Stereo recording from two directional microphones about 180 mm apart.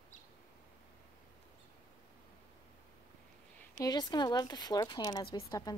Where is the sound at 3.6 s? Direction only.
20° left (ahead or behind).